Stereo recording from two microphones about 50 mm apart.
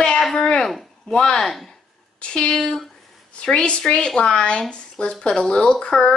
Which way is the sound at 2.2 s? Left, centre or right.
Centre.